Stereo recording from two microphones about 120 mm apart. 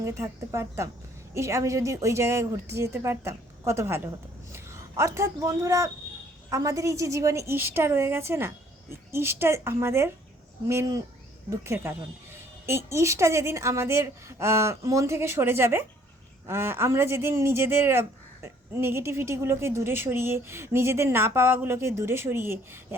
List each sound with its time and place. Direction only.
0.0 s a woman's voice: 25° right (ahead or behind)